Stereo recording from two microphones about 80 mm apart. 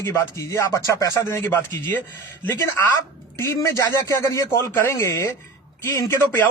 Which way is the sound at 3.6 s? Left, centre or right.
Left.